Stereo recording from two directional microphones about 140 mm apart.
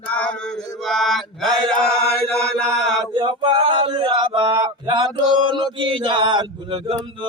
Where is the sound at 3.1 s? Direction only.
35° right (ahead or behind).